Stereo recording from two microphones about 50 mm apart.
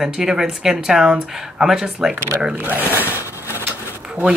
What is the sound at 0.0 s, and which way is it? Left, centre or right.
A woman's voice, centre.